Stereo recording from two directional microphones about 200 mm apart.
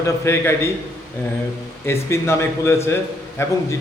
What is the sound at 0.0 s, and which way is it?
Speech, 15° left (ahead or behind).